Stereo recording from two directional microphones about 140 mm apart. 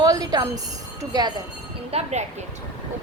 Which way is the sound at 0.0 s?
25° right (ahead or behind).